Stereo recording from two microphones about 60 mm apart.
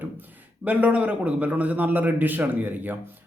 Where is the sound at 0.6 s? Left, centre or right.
Right.